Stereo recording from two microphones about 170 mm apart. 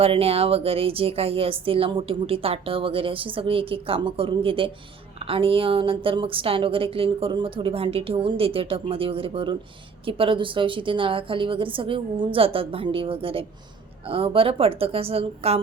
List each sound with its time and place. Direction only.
0.0 s speech: 35° right (ahead or behind)